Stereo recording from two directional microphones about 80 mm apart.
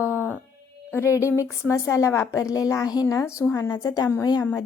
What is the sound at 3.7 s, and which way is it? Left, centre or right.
Speech, left.